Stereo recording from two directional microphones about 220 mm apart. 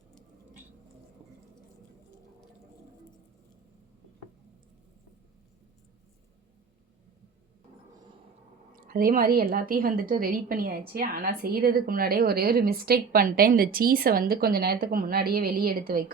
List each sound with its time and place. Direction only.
8.9 s a woman's voice: 40° right (ahead or behind)